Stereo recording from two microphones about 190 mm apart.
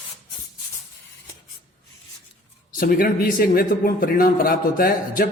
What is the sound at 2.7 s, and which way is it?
A man's voice, 50° left (ahead or behind).